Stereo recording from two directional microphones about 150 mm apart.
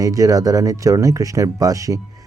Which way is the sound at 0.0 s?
25° right (ahead or behind).